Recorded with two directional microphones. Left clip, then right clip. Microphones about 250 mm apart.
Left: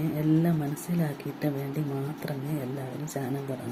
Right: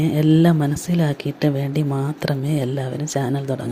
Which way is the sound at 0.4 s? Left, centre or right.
Right.